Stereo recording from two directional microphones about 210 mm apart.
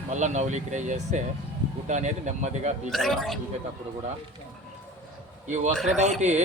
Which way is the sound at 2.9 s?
Centre (ahead or behind).